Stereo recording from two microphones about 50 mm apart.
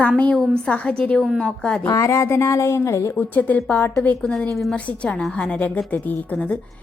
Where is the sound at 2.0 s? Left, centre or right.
Left.